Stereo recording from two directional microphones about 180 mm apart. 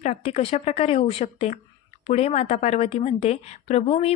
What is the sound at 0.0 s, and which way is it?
A woman's voice, 35° left (ahead or behind).